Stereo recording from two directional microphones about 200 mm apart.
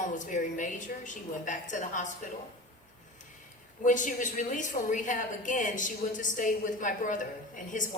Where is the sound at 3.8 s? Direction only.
40° left (ahead or behind).